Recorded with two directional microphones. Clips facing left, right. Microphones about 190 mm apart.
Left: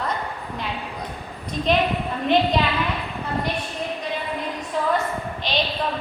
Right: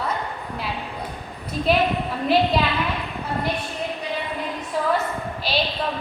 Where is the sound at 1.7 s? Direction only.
5° right (ahead or behind).